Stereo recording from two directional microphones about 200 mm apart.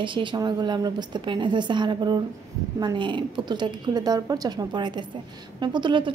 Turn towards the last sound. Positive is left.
turn(degrees=-25)  # may be behind; listen again after turning